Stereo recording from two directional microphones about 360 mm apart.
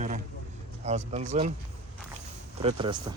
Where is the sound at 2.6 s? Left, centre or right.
Centre.